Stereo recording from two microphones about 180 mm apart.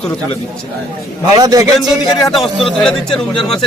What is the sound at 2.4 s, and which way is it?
A man's voice, centre (ahead or behind).